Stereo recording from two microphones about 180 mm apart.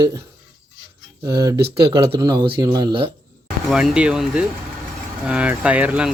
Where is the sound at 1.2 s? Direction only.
20° right (ahead or behind).